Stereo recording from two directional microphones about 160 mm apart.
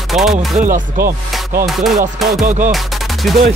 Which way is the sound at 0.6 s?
55° right (ahead or behind).